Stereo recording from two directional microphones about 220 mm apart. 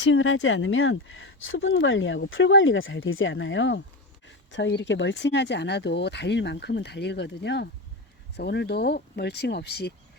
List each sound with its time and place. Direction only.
0.0 s speech: 60° left (ahead or behind)